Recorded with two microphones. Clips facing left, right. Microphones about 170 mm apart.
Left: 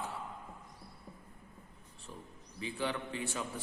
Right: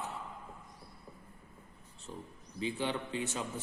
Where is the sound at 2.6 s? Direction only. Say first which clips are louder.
Right 2 dB; 20° right (ahead or behind).